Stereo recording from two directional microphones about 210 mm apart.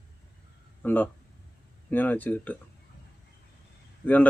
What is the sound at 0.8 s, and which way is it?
Speech, 10° left (ahead or behind).